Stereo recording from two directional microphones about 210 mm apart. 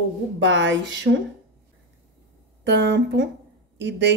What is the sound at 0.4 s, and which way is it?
Speech, 60° right (ahead or behind).